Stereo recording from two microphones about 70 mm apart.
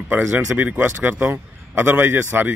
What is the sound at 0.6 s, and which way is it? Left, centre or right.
Speech, right.